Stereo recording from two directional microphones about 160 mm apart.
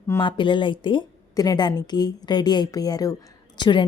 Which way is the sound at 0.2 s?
30° left (ahead or behind).